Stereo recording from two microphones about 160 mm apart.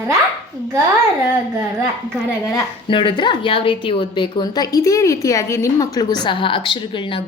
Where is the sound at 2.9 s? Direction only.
30° left (ahead or behind).